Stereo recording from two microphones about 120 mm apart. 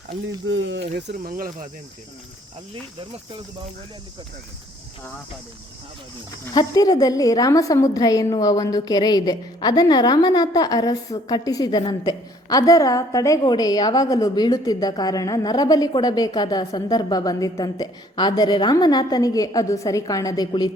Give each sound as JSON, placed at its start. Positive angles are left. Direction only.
{"t": 6.5, "sound": "a woman's voice", "side_deg": 35}